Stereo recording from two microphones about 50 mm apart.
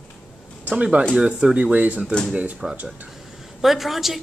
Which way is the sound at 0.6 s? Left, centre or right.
Right.